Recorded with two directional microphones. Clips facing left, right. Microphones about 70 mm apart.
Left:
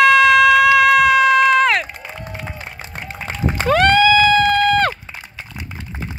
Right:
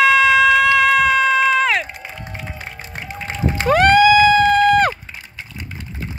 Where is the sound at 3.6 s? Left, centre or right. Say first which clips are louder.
Right 2 dB; centre.